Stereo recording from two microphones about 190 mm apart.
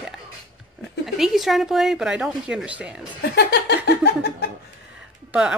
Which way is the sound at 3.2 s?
60° left (ahead or behind).